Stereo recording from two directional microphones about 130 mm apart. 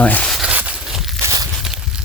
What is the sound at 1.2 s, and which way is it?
Walk, 25° right (ahead or behind).